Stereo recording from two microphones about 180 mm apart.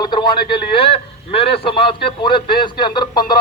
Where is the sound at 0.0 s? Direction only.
25° left (ahead or behind).